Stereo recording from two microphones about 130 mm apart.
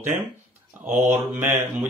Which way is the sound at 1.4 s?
20° right (ahead or behind).